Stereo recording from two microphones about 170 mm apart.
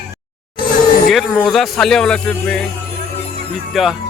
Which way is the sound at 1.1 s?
Centre (ahead or behind).